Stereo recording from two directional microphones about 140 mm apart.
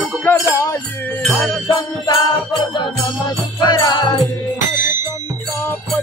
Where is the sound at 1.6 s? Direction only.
35° left (ahead or behind).